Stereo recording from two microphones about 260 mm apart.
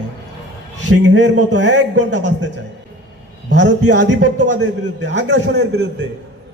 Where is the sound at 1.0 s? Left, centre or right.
Right.